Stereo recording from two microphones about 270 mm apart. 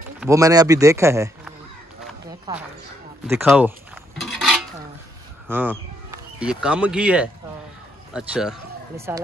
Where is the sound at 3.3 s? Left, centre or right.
Centre.